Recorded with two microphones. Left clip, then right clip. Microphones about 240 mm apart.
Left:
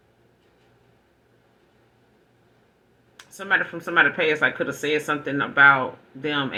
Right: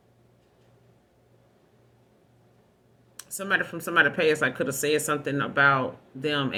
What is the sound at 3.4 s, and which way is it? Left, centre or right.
Speech, right.